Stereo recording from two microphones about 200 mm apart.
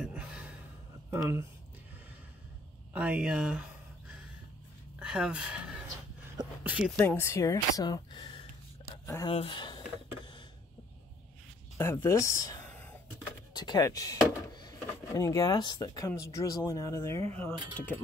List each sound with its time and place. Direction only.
0.0 s gasp: 5° right (ahead or behind)
1.1 s speech: 10° right (ahead or behind)
2.9 s speech: 5° right (ahead or behind)
4.9 s speech: 5° right (ahead or behind)
7.0 s a sound: 10° left (ahead or behind); by 9.0 s 25° left (ahead or behind)
9.0 s speech: 15° left (ahead or behind)
9.3 s speech: 25° left (ahead or behind)
11.8 s speech: 10° left (ahead or behind)